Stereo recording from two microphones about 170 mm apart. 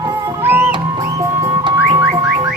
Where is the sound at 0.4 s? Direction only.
10° right (ahead or behind).